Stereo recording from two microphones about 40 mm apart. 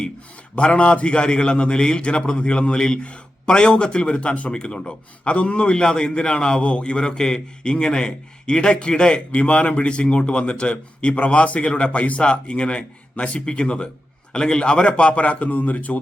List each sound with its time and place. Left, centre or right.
0.5 s a man's voice: left